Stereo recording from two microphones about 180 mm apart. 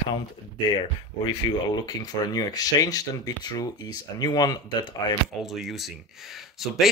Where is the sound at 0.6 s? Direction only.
25° left (ahead or behind).